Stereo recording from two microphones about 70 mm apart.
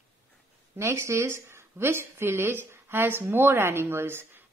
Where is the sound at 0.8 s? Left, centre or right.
Right.